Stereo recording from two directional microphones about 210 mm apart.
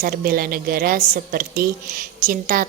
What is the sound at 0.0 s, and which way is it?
A woman's voice, 45° right (ahead or behind).